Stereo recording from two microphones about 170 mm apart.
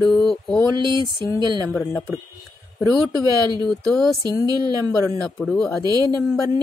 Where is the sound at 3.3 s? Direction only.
25° right (ahead or behind).